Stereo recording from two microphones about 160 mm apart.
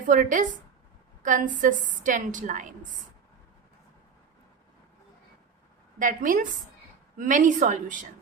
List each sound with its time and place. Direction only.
0.1 s a woman's voice: 55° right (ahead or behind)
6.0 s a woman's voice: 55° right (ahead or behind)